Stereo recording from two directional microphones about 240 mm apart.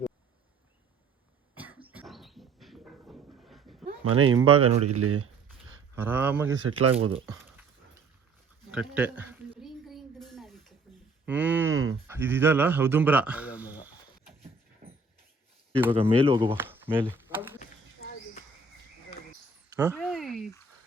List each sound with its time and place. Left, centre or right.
1.5 s cough: centre
1.9 s a sound: centre
4.1 s speech: right
6.0 s speech: centre
6.7 s speech: right
7.1 s speech: right
8.7 s a sound: centre
11.3 s speech: centre
15.9 s speech: right
16.6 s a sound: centre
19.7 s speech: centre
20.0 s a sound: centre